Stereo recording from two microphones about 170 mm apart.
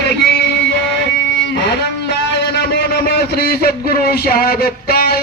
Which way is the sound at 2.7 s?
70° left (ahead or behind).